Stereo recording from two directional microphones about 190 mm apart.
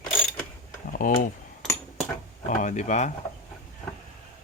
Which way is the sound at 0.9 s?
45° left (ahead or behind).